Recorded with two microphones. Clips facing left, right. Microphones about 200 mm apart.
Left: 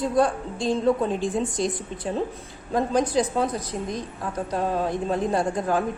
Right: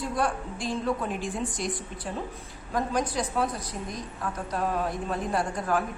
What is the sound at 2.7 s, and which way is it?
A woman's voice, 25° left (ahead or behind).